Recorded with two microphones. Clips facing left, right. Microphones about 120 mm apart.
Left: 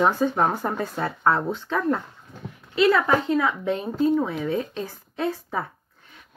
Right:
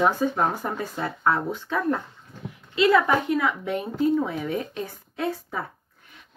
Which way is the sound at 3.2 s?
25° left (ahead or behind).